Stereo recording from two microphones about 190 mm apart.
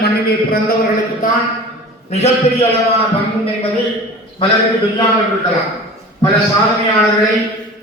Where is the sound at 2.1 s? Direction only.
35° left (ahead or behind).